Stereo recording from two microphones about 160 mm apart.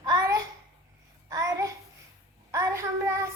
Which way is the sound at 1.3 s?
20° right (ahead or behind).